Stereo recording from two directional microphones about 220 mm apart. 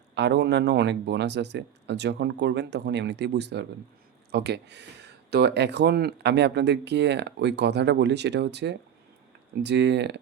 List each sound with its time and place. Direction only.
0.1 s speech: 50° right (ahead or behind)